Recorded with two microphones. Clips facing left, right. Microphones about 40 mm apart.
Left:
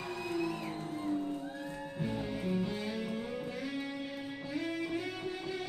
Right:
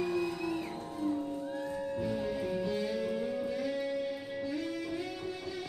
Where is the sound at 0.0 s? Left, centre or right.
Centre.